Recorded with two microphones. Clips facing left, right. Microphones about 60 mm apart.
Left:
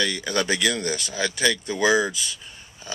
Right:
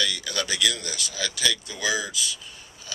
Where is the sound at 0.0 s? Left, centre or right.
Left.